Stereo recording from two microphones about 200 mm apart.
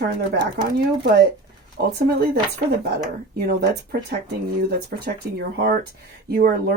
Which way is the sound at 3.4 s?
50° right (ahead or behind).